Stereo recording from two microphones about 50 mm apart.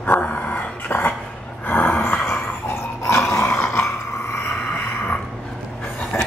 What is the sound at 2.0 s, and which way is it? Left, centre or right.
Dog, left.